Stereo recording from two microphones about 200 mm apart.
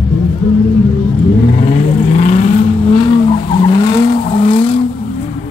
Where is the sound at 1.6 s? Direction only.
30° left (ahead or behind).